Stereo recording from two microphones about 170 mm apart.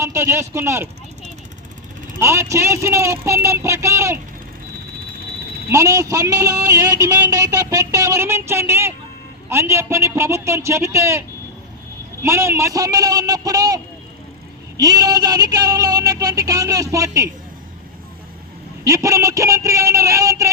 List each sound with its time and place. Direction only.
0.0 s speech: 15° right (ahead or behind)
2.2 s a man's voice: 15° right (ahead or behind)
5.7 s a sound: 20° right (ahead or behind)
9.5 s a man's voice: 15° right (ahead or behind)
12.2 s a sound: 15° right (ahead or behind)
18.9 s a man's voice: 20° right (ahead or behind)